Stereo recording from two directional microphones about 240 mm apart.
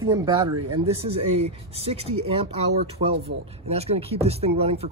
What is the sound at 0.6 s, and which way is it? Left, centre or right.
Speech, right.